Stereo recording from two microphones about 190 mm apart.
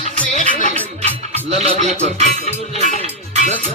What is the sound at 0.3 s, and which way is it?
Music, 40° right (ahead or behind).